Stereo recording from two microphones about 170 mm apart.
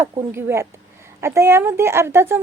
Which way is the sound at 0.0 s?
15° right (ahead or behind).